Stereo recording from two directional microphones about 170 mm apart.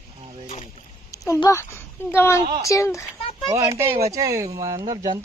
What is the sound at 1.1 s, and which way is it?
A child's voice, 20° left (ahead or behind).